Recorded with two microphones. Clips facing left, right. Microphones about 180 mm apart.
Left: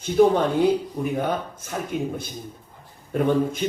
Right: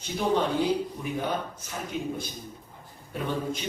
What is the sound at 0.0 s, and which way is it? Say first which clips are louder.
Speech: left 8 dB; 50° left (ahead or behind).